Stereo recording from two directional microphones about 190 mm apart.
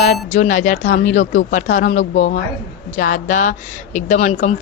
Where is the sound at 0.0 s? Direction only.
40° left (ahead or behind).